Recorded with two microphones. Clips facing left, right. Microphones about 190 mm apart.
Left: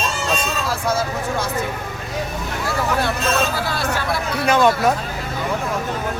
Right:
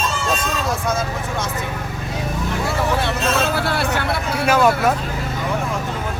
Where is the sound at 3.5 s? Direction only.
65° right (ahead or behind).